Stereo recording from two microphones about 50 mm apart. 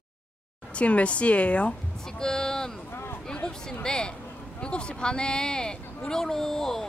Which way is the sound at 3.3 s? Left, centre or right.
Centre.